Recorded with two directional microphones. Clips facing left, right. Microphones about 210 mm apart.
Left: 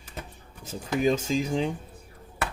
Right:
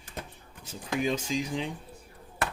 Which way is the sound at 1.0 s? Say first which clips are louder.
Left 6 dB; 45° left (ahead or behind).